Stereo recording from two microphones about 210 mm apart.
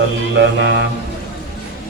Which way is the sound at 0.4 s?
55° right (ahead or behind).